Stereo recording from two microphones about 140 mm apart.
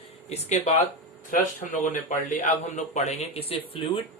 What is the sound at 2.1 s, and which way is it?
A man's voice, 65° left (ahead or behind).